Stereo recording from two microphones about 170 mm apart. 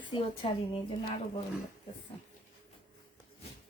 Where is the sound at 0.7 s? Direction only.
30° left (ahead or behind).